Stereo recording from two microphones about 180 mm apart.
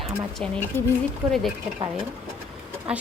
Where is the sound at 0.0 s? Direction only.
Centre (ahead or behind).